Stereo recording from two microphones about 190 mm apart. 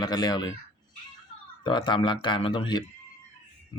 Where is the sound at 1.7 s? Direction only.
25° left (ahead or behind).